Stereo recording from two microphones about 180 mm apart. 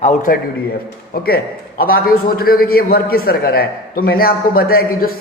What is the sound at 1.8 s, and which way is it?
A man's voice, 55° left (ahead or behind).